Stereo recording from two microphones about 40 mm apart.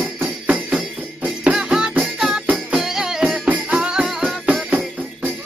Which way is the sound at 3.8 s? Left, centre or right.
Right.